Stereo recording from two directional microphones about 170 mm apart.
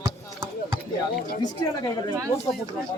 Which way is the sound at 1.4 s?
20° left (ahead or behind).